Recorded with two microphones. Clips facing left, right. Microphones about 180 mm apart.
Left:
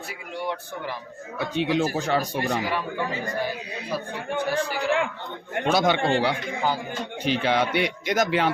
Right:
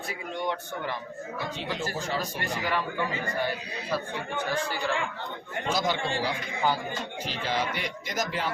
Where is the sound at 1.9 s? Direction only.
70° left (ahead or behind).